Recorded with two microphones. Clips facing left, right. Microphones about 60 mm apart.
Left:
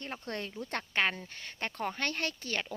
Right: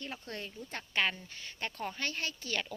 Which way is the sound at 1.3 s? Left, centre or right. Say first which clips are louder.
Left 2 dB; left.